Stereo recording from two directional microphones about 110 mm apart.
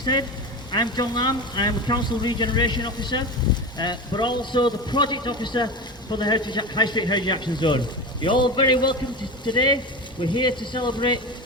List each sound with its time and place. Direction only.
0.7 s a man's voice: 40° left (ahead or behind)